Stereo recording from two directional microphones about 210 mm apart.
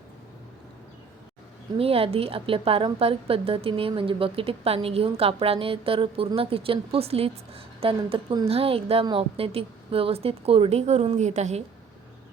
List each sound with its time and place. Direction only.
1.8 s a woman's voice: 25° right (ahead or behind)